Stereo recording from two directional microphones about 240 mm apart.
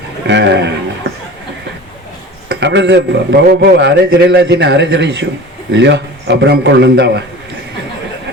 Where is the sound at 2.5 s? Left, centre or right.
Right.